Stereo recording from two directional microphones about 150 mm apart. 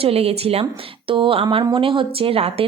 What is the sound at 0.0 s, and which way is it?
A woman's voice, 40° right (ahead or behind).